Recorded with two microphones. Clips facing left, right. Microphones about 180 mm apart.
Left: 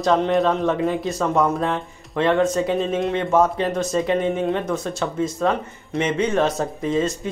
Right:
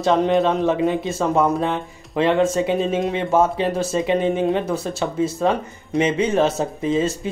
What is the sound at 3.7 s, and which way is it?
Speech, 30° right (ahead or behind).